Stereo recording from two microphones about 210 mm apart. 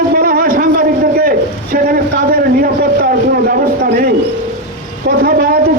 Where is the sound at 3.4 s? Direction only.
45° right (ahead or behind).